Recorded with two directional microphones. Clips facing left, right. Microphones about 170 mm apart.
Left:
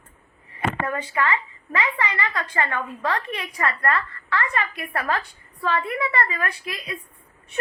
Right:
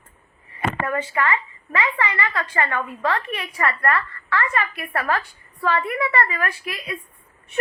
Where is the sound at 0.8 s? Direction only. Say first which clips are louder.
Right 3 dB; 15° left (ahead or behind).